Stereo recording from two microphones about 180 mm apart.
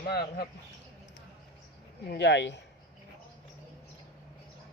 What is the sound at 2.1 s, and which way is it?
Speech, 70° left (ahead or behind).